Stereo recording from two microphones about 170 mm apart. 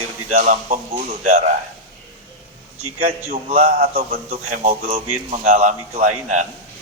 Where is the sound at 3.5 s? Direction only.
40° right (ahead or behind).